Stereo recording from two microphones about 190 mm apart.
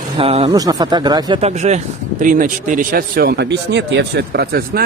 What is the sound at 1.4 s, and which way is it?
Speech, 35° right (ahead or behind).